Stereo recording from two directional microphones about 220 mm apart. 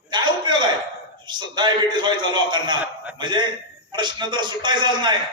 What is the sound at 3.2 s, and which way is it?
A man's voice, 20° right (ahead or behind).